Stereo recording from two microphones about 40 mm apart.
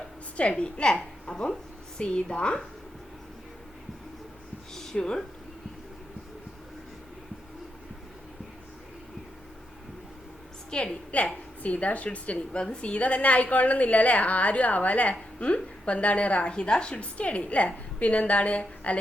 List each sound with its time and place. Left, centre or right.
0.3 s a woman's voice: left
4.7 s a sound: centre
4.9 s a woman's voice: left
10.7 s a woman's voice: left
11.1 s a woman's voice: left
12.5 s a woman's voice: left